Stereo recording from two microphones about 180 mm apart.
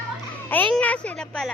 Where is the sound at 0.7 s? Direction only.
5° left (ahead or behind).